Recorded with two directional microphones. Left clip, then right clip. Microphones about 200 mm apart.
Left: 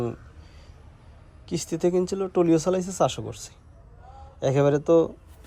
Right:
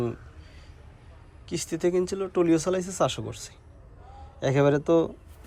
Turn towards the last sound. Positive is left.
turn(degrees=20)  # may be behind; listen again after turning